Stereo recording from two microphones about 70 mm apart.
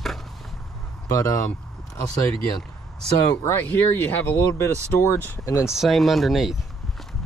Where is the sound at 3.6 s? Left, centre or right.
Left.